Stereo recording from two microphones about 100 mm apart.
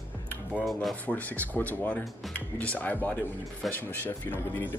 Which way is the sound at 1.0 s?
15° left (ahead or behind).